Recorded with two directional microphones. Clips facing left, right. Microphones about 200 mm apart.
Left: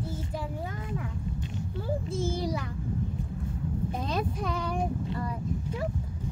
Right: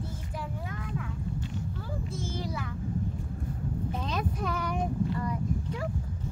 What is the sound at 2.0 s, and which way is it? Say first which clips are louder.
Speech: left 4 dB; 30° left (ahead or behind).